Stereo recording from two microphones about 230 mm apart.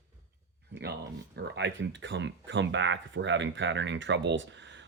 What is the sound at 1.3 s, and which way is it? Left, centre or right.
Speech, right.